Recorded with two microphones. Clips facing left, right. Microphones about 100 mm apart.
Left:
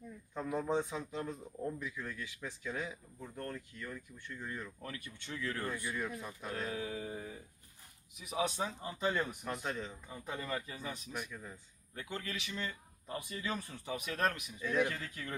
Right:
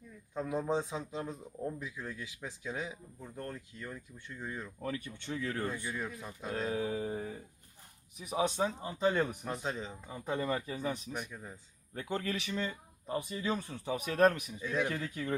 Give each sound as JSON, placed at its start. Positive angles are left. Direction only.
{"t": 0.3, "sound": "speech", "side_deg": -15}
{"t": 4.8, "sound": "speech", "side_deg": -30}
{"t": 11.3, "sound": "speech", "side_deg": -20}
{"t": 11.9, "sound": "speech", "side_deg": -35}